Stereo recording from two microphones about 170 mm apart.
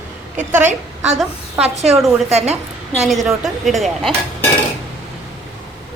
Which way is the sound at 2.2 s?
40° right (ahead or behind).